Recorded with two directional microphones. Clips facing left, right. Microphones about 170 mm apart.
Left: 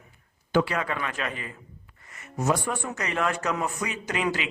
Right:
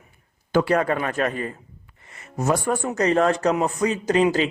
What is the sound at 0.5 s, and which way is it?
A man's voice, 45° right (ahead or behind).